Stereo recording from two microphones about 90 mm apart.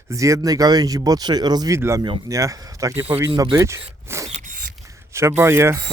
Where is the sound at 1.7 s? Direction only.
35° right (ahead or behind).